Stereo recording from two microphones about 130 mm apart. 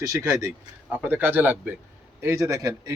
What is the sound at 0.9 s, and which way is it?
A man's voice, 15° right (ahead or behind).